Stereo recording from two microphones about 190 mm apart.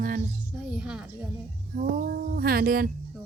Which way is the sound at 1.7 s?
45° right (ahead or behind).